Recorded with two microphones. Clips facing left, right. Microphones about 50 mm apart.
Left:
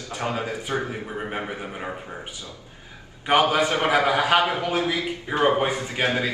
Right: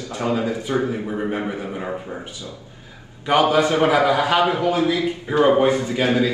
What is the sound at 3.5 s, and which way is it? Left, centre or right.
A man's voice, left.